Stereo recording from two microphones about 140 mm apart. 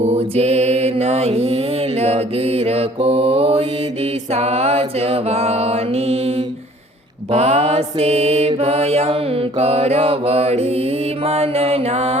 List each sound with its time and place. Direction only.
0.0 s mantra: 50° right (ahead or behind)